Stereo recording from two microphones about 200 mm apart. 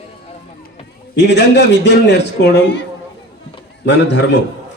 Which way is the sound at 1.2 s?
60° left (ahead or behind).